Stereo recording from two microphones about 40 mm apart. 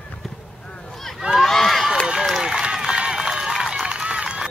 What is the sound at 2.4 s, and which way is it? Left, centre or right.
Run, centre.